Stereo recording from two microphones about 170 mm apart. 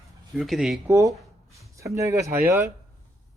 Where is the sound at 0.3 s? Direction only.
Centre (ahead or behind).